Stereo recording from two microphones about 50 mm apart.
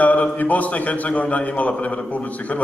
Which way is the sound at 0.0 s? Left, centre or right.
Left.